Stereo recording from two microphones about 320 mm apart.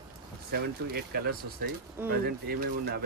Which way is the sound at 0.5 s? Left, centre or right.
Right.